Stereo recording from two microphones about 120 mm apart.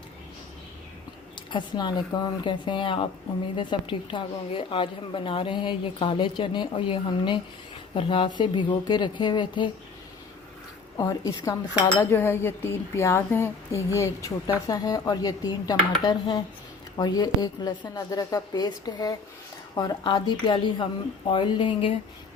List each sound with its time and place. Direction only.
1.5 s a woman's voice: 40° left (ahead or behind)
11.2 s a woman's voice: 30° left (ahead or behind); by 21.9 s 45° left (ahead or behind)